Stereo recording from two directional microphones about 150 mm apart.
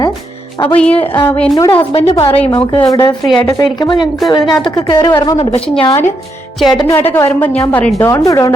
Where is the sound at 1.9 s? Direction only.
40° left (ahead or behind).